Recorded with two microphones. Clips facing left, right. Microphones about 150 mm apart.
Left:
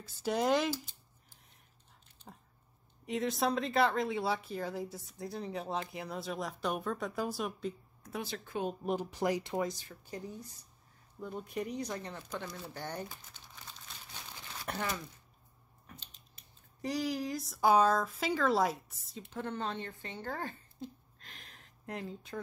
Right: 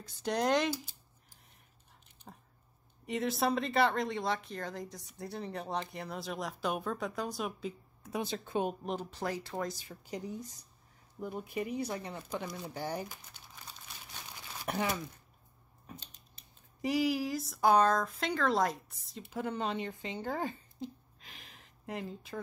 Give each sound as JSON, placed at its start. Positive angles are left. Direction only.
{"t": 0.0, "sound": "speech", "side_deg": 5}
{"t": 2.3, "sound": "a sound", "side_deg": 0}
{"t": 3.1, "sound": "speech", "side_deg": 0}
{"t": 8.1, "sound": "speech", "side_deg": -20}
{"t": 8.8, "sound": "speech", "side_deg": 10}
{"t": 9.8, "sound": "speech", "side_deg": -15}
{"t": 11.1, "sound": "speech", "side_deg": -5}
{"t": 14.6, "sound": "speech", "side_deg": -10}
{"t": 16.8, "sound": "speech", "side_deg": -5}
{"t": 21.2, "sound": "a sound", "side_deg": 0}